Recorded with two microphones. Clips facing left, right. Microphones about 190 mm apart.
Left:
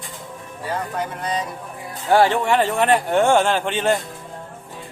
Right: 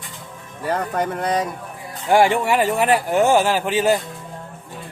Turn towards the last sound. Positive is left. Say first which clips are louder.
# right 2 dB
turn(degrees=-5)  # may be behind; listen again after turning